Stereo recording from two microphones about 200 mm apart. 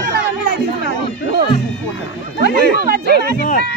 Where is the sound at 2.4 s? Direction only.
50° right (ahead or behind).